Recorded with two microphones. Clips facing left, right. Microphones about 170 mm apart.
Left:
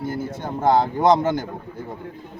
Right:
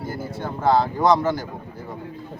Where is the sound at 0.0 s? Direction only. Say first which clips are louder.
Left 4 dB; 20° left (ahead or behind).